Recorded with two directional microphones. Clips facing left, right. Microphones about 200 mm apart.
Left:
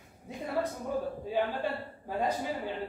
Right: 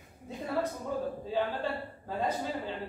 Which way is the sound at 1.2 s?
15° left (ahead or behind).